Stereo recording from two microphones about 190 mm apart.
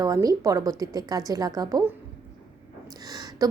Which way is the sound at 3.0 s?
20° right (ahead or behind).